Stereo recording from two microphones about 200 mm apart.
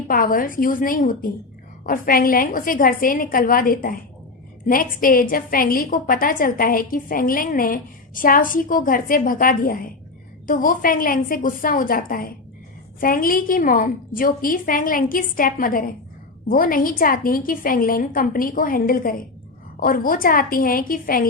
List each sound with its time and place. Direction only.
0.1 s a woman's voice: 45° left (ahead or behind)